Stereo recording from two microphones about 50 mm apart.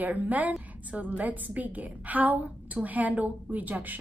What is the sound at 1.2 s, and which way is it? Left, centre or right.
A woman's voice, right.